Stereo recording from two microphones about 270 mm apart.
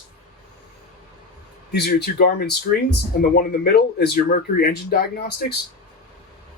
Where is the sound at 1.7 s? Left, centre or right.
Left.